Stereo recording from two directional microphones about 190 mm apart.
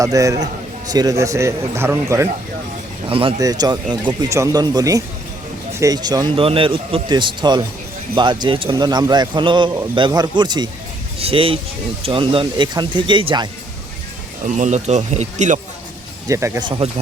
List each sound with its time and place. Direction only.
0.0 s a man's voice: 15° right (ahead or behind)
3.1 s speech: 30° right (ahead or behind)
14.4 s speech: 40° right (ahead or behind)
16.3 s speech: 20° right (ahead or behind)